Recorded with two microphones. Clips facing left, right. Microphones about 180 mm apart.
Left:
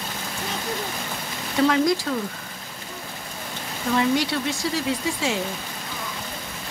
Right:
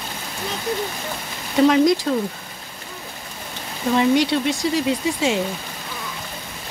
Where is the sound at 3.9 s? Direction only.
20° right (ahead or behind).